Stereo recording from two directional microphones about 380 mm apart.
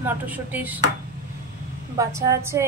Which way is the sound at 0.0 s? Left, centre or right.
Centre.